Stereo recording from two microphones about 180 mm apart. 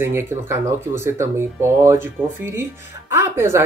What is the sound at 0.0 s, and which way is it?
Speech, 15° right (ahead or behind).